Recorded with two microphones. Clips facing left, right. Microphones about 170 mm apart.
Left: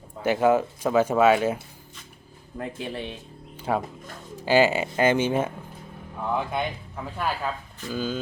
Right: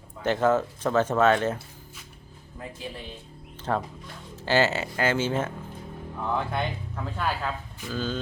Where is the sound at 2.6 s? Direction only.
70° left (ahead or behind).